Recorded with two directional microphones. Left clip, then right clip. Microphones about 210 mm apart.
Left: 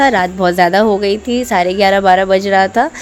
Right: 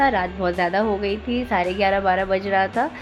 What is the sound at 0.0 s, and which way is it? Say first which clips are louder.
A woman's voice: left 8 dB; 40° left (ahead or behind).